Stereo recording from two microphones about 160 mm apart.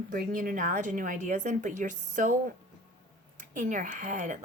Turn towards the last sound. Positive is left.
turn(degrees=-50)  # may be behind; listen again after turning